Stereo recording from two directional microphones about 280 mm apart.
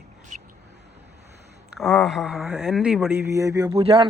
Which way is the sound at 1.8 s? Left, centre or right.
Centre.